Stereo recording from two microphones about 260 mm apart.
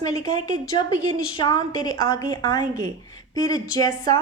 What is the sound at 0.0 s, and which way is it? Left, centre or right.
A woman's voice, centre.